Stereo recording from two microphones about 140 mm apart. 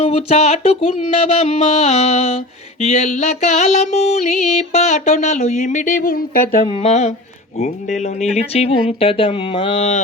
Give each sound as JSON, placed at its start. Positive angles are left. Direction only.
{"t": 0.0, "sound": "speech", "side_deg": 50}
{"t": 2.8, "sound": "music", "side_deg": 55}
{"t": 6.8, "sound": "speech", "side_deg": 55}